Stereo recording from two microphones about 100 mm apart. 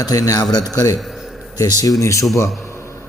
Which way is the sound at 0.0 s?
35° left (ahead or behind).